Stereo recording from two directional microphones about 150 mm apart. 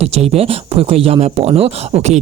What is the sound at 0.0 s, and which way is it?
Speech, 45° right (ahead or behind).